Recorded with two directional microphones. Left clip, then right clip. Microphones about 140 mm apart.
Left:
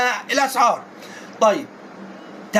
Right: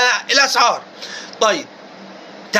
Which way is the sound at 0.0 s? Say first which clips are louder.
Right 5 dB; 10° right (ahead or behind).